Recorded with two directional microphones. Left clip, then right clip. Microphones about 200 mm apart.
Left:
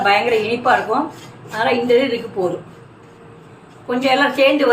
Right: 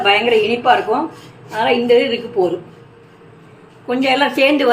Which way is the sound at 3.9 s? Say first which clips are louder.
Right 1 dB; 45° right (ahead or behind).